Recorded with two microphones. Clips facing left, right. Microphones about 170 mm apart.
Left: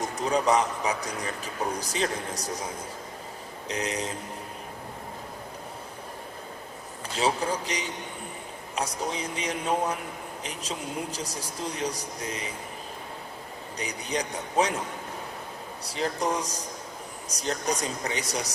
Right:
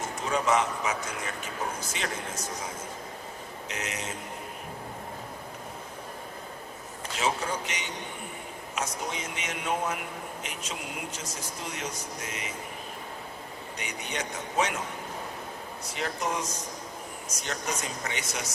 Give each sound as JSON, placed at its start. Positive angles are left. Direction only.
{"t": 0.0, "sound": "speech", "side_deg": 35}
{"t": 3.7, "sound": "speech", "side_deg": 35}
{"t": 7.2, "sound": "speech", "side_deg": 35}
{"t": 13.7, "sound": "speech", "side_deg": 35}
{"t": 15.8, "sound": "speech", "side_deg": 35}